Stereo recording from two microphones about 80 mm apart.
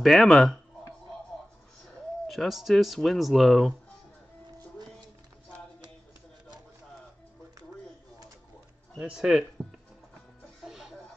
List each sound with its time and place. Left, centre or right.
0.0 s speech: centre
2.2 s speech: centre
9.1 s speech: centre
9.6 s music: right
10.6 s chicken: centre